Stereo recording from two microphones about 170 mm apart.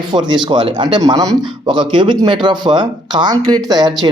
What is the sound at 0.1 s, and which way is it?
Speech, 30° right (ahead or behind).